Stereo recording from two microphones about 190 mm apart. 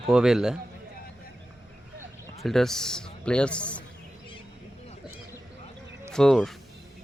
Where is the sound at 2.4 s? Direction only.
Centre (ahead or behind).